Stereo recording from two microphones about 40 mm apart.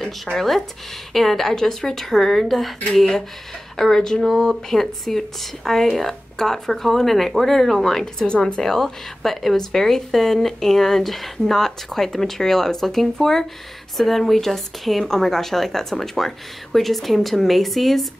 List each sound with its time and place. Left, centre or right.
0.4 s a woman's voice: centre
8.0 s a woman's voice: centre